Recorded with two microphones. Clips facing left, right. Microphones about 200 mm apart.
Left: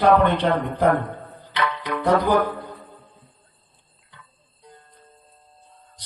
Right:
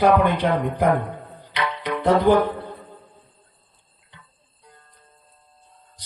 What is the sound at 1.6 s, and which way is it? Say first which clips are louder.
Music: right 1 dB; 20° right (ahead or behind).